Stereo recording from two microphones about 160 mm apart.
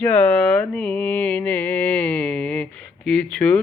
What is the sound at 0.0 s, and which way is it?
Mantra, 10° left (ahead or behind).